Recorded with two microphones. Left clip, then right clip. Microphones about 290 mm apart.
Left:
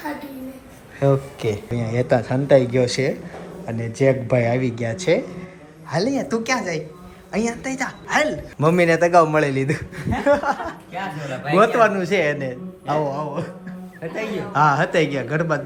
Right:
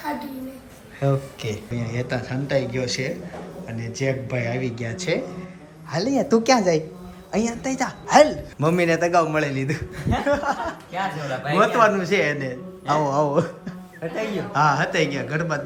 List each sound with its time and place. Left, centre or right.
1.0 s a woman's voice: centre